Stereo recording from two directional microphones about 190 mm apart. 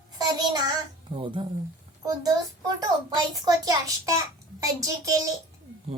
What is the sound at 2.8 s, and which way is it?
A child's voice, 20° right (ahead or behind).